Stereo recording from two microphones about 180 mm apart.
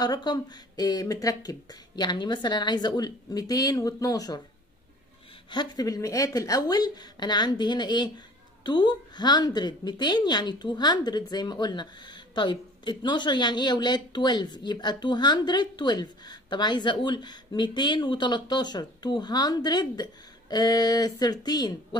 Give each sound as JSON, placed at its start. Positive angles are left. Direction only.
{"t": 0.0, "sound": "a woman's voice", "side_deg": 25}
{"t": 5.5, "sound": "a woman's voice", "side_deg": 20}